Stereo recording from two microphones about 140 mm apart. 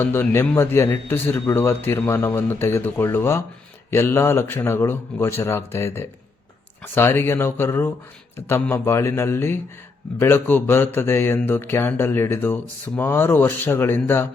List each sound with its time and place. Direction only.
0.0 s a man's voice: 15° left (ahead or behind)